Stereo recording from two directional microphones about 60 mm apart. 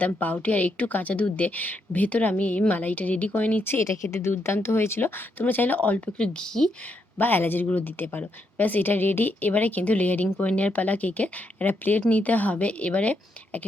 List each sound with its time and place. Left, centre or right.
0.2 s speech: left
3.6 s a woman's voice: left
3.8 s a woman's voice: left; by 6.7 s centre
7.2 s a woman's voice: left